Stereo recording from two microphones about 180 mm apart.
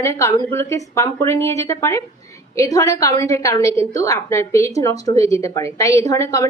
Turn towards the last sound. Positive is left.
turn(degrees=15)  # may be behind; listen again after turning